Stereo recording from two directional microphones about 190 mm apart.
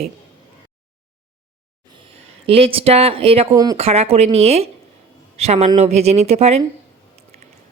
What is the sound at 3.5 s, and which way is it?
Speech, 20° right (ahead or behind).